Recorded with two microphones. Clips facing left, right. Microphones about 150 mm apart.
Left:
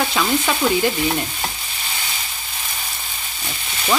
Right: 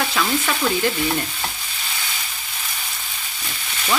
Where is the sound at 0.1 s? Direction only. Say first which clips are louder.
Left 2 dB; 15° left (ahead or behind).